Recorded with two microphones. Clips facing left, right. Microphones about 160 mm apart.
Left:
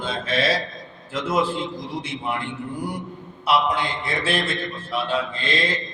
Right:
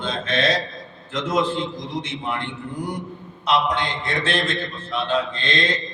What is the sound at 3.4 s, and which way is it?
A man's voice, 5° left (ahead or behind).